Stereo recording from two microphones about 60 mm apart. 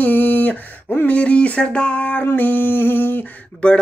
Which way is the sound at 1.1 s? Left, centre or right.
Left.